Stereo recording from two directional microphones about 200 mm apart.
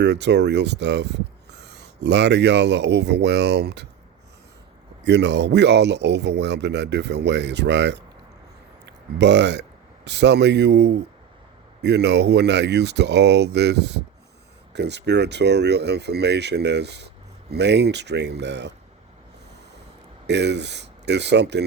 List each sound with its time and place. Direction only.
0.0 s speech: 60° right (ahead or behind)
5.0 s speech: 60° right (ahead or behind)
20.2 s speech: 60° right (ahead or behind)